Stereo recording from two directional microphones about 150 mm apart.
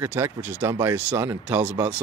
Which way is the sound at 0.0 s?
15° right (ahead or behind).